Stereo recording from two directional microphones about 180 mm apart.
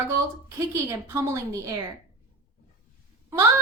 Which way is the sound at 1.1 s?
15° right (ahead or behind).